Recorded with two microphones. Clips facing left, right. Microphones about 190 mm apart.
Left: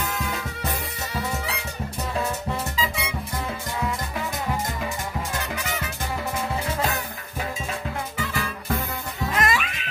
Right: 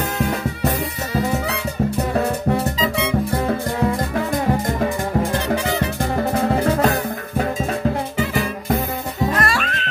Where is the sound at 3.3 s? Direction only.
55° right (ahead or behind).